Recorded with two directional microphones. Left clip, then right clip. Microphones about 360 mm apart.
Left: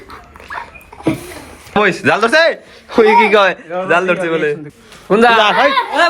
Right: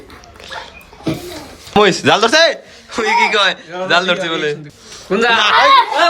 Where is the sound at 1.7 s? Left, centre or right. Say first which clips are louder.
Right 1 dB; centre.